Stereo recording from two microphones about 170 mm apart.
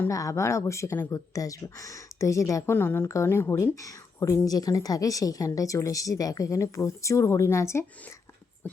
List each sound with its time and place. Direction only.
0.0 s speech: 20° left (ahead or behind)